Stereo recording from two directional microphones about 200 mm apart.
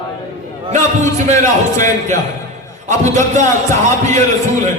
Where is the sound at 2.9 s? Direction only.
35° right (ahead or behind).